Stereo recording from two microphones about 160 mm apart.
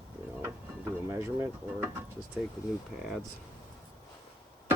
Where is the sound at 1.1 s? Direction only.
15° right (ahead or behind).